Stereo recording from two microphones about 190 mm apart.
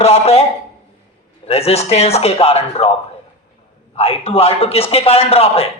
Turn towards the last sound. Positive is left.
turn(degrees=30)  # may be behind; listen again after turning